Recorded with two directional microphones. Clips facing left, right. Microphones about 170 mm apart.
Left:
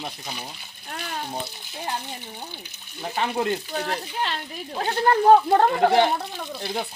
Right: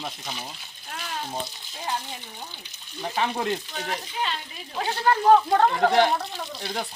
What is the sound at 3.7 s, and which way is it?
Speech, 35° left (ahead or behind).